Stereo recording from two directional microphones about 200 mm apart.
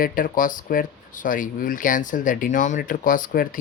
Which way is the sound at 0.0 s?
45° left (ahead or behind).